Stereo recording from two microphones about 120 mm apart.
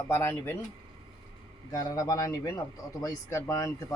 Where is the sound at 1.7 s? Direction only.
30° left (ahead or behind).